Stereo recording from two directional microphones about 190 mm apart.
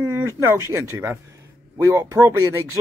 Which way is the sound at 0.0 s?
15° right (ahead or behind).